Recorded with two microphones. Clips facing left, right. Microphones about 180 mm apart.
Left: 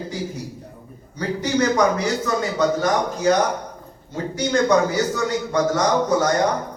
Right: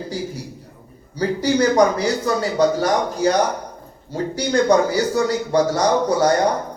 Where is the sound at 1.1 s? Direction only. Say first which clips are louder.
Right 3 dB; 35° right (ahead or behind).